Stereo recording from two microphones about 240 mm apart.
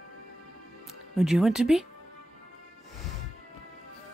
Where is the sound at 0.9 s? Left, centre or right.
Centre.